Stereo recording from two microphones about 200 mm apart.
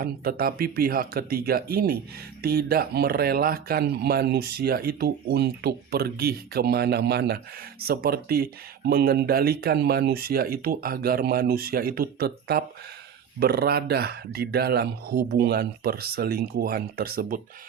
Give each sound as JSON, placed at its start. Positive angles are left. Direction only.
{"t": 0.0, "sound": "speech", "side_deg": -50}